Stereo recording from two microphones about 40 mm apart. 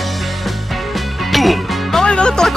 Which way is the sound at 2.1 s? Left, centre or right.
Left.